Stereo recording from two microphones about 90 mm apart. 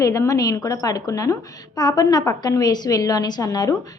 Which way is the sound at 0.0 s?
40° left (ahead or behind).